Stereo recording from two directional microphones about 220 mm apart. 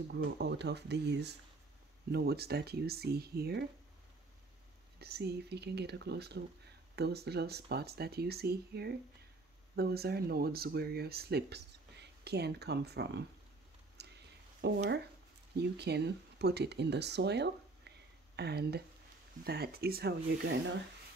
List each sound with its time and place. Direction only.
0.1 s speech: 50° right (ahead or behind)
4.9 s speech: 45° right (ahead or behind)
14.0 s a sound: 50° right (ahead or behind)
14.6 s speech: 50° right (ahead or behind)